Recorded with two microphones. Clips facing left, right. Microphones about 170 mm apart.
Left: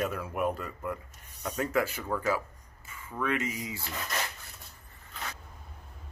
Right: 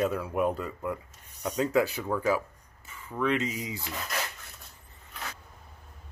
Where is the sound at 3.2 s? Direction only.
20° right (ahead or behind).